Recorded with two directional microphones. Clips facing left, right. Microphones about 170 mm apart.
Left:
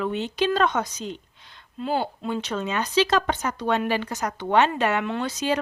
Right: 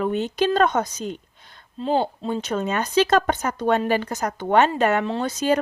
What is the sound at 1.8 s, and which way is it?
Speech, 30° right (ahead or behind).